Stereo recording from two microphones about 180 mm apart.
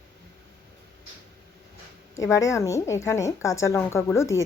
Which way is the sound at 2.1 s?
15° left (ahead or behind).